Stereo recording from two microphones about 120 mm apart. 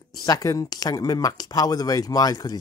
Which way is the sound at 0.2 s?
30° left (ahead or behind).